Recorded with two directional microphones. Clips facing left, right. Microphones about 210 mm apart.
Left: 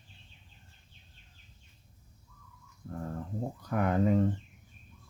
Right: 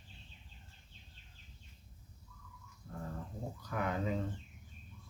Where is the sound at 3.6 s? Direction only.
55° left (ahead or behind).